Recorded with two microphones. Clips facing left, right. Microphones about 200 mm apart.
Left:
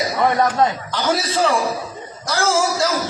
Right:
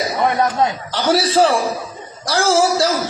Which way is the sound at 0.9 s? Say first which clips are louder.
Right 9 dB; 35° right (ahead or behind).